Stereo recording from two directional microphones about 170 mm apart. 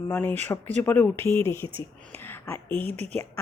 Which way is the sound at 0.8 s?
10° left (ahead or behind).